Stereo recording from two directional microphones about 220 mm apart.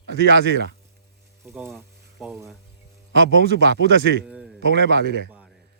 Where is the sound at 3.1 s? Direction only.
55° right (ahead or behind).